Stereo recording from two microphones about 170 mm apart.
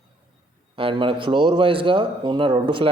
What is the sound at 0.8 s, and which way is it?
Speech, 30° right (ahead or behind).